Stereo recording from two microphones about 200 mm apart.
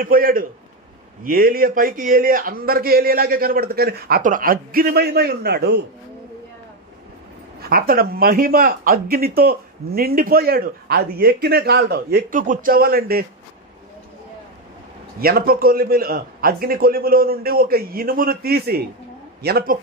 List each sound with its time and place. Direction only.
0.0 s speech: 45° right (ahead or behind)
7.6 s speech: 45° right (ahead or behind)
15.1 s speech: 50° right (ahead or behind)